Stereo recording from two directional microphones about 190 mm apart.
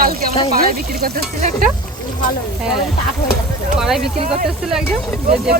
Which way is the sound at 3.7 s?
5° right (ahead or behind).